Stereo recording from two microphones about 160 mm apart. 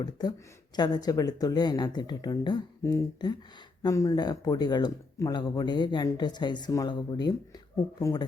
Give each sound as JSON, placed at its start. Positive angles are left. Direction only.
{"t": 0.0, "sound": "speech", "side_deg": 25}